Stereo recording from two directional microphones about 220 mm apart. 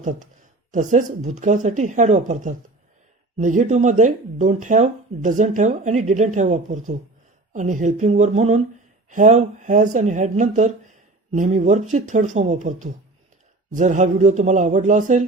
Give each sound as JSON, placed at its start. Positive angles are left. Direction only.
{"t": 0.0, "sound": "speech", "side_deg": -35}